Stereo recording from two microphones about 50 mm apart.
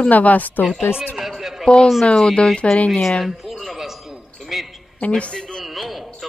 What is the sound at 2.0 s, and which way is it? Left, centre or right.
Speech, centre.